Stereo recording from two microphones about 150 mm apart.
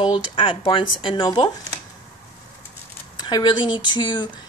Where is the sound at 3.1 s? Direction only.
30° left (ahead or behind).